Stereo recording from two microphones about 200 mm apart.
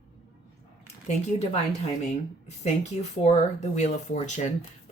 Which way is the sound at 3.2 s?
35° left (ahead or behind).